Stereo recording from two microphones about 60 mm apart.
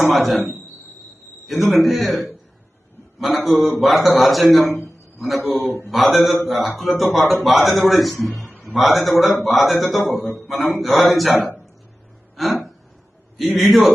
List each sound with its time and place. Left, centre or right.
0.1 s a man's voice: centre
12.4 s a sound: centre
13.4 s a man's voice: centre